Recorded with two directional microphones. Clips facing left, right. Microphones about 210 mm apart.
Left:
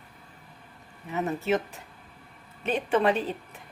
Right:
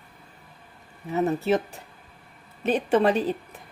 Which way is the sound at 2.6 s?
35° right (ahead or behind).